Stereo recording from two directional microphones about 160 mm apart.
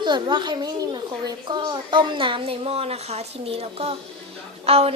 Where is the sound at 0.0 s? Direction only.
30° right (ahead or behind).